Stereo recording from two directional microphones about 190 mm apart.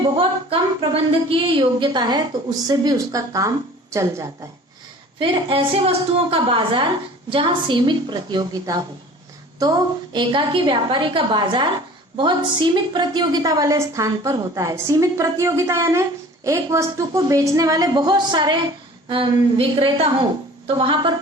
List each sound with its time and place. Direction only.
0.0 s a woman's voice: 25° right (ahead or behind)
5.2 s a woman's voice: 25° right (ahead or behind)